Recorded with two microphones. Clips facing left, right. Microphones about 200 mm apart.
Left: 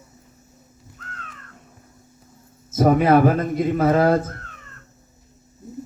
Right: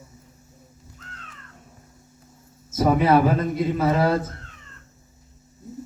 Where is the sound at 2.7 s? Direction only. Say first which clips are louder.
Left 3 dB; 50° left (ahead or behind).